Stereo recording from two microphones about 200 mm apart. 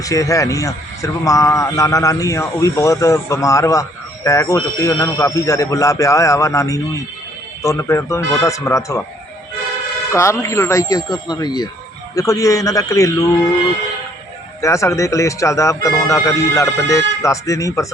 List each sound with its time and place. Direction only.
0.0 s a man's voice: 15° left (ahead or behind)
10.1 s a man's voice: 15° left (ahead or behind)
14.6 s a man's voice: 15° left (ahead or behind)